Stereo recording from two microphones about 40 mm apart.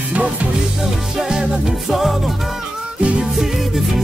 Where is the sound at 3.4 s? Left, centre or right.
Centre.